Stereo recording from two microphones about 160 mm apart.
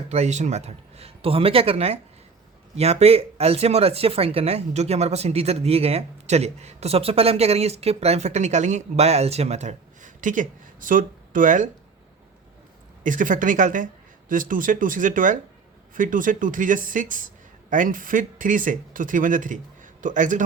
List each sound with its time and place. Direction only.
0.1 s speech: 45° right (ahead or behind)
13.0 s speech: 55° right (ahead or behind)